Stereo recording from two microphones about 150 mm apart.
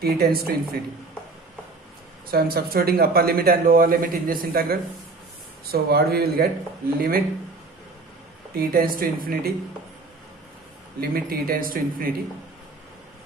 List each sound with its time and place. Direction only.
0.0 s speech: 85° right
2.3 s speech: 85° right
5.7 s speech: 90° right
7.0 s speech: 75° right (ahead or behind)
8.5 s speech: 75° right (ahead or behind)
11.0 s speech: 80° right